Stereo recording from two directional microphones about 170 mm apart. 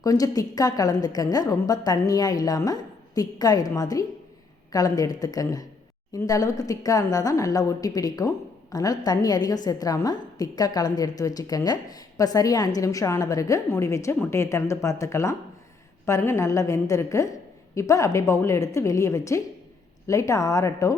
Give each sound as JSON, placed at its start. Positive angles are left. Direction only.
{"t": 0.0, "sound": "a woman's voice", "side_deg": 20}